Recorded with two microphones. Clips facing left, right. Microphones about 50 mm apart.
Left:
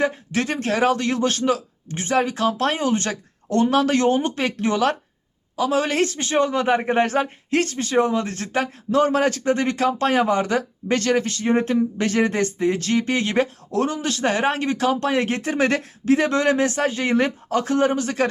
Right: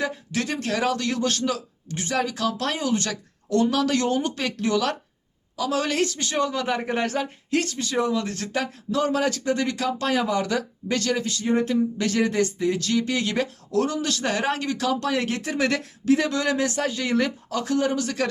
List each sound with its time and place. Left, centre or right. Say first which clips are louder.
0.0 s speech: left 5 dB; left